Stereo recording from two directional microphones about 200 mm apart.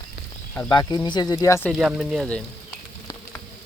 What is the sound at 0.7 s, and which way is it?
Speech, 20° left (ahead or behind).